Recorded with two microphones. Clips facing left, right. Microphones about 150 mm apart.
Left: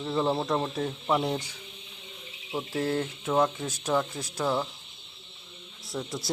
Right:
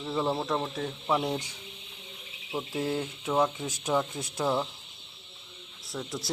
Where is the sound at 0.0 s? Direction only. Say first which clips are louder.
Left 2 dB; centre (ahead or behind).